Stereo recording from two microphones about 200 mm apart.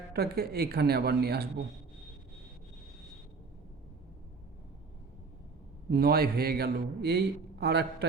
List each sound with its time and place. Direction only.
0.1 s a man's voice: 50° right (ahead or behind)
5.9 s a man's voice: 50° right (ahead or behind)